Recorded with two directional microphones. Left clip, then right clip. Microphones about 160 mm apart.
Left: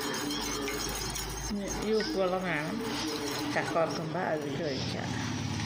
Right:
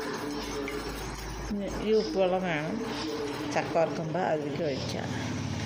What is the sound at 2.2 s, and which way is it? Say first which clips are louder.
Speech: right 3 dB; 25° right (ahead or behind).